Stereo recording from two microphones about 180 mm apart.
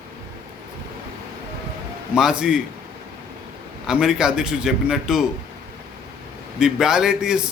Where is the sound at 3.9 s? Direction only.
5° right (ahead or behind).